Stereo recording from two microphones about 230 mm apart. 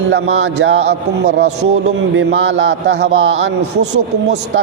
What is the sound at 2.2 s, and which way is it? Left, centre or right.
A man's voice, right.